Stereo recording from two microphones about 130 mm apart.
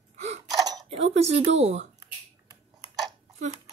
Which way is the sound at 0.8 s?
50° right (ahead or behind).